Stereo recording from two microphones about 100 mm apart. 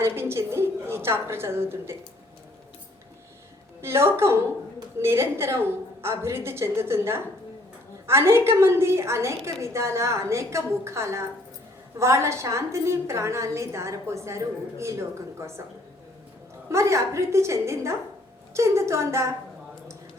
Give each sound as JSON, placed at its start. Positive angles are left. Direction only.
{"t": 0.0, "sound": "a woman's voice", "side_deg": -25}
{"t": 3.8, "sound": "a woman's voice", "side_deg": -25}
{"t": 16.6, "sound": "a woman's voice", "side_deg": -30}